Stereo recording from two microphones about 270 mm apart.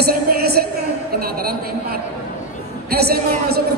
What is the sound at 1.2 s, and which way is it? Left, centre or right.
Speech, right.